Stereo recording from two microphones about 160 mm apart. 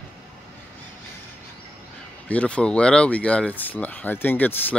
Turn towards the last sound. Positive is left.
turn(degrees=10)  # may be behind; listen again after turning